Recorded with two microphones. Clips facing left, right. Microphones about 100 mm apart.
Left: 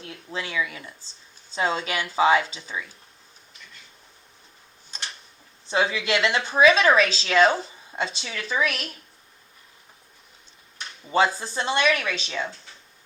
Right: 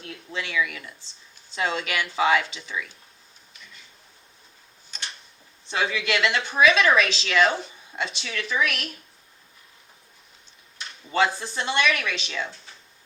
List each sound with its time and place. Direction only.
0.0 s speech: 30° left (ahead or behind)
5.7 s a woman's voice: 30° left (ahead or behind)
11.3 s a woman's voice: 30° left (ahead or behind)